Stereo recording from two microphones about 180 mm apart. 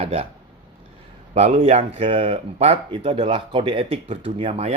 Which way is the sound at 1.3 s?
35° right (ahead or behind).